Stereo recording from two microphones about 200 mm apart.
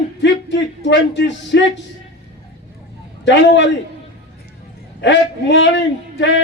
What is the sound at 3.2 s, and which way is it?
Speech, 65° left (ahead or behind).